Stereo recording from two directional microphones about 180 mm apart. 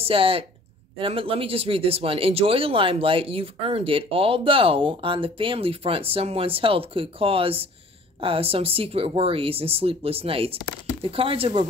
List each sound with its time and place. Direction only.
0.0 s speech: 30° right (ahead or behind)